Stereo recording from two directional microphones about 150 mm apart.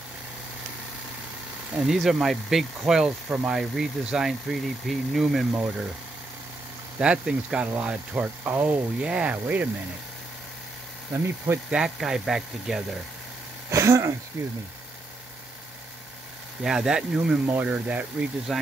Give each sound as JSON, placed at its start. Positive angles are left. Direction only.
{"t": 1.8, "sound": "speech", "side_deg": 0}
{"t": 7.0, "sound": "speech", "side_deg": -5}
{"t": 11.4, "sound": "speech", "side_deg": -10}
{"t": 13.7, "sound": "speech", "side_deg": -20}
{"t": 16.6, "sound": "speech", "side_deg": -5}
{"t": 18.5, "sound": "speech", "side_deg": 0}